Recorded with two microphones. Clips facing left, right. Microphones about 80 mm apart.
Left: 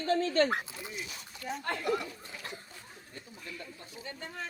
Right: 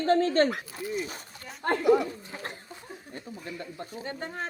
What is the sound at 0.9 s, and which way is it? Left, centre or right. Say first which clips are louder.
Speech: right 9 dB; right.